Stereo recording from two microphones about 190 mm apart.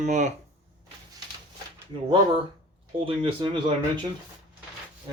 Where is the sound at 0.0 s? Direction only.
40° right (ahead or behind).